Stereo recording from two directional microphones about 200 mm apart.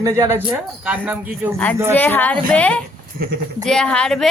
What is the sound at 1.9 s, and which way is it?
A woman's voice, 10° left (ahead or behind).